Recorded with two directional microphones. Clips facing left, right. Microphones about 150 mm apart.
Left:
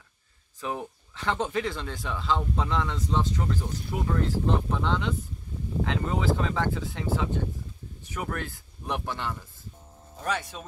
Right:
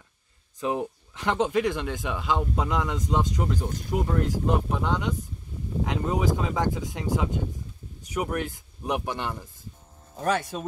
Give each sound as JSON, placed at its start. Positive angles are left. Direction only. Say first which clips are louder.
{"t": 0.6, "sound": "speech", "louder": "right 5 dB", "side_deg": -15}
{"t": 10.2, "sound": "speech", "louder": "right 5 dB", "side_deg": -45}